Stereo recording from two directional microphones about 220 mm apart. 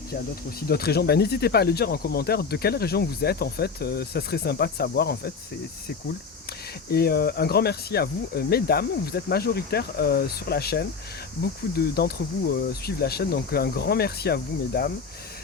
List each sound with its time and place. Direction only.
0.7 s speech: 45° left (ahead or behind)
6.9 s speech: 45° left (ahead or behind)